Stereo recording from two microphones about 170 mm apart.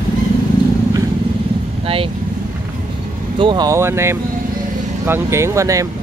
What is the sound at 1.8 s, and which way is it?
Speech, 35° right (ahead or behind).